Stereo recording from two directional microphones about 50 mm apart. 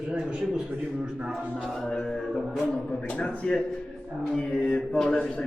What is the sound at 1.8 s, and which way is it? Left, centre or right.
Speech, centre.